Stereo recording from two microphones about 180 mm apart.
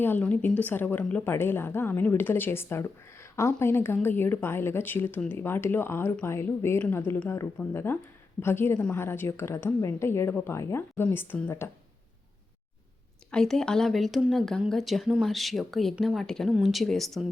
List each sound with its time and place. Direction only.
0.0 s a woman's voice: 10° left (ahead or behind)
13.3 s a woman's voice: 5° left (ahead or behind)